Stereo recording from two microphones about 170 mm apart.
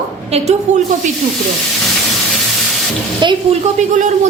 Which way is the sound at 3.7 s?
45° right (ahead or behind).